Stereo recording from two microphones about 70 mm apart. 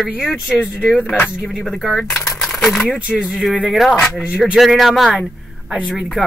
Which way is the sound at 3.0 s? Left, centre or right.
Centre.